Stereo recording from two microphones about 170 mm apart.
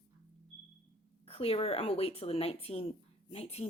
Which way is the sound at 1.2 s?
35° left (ahead or behind).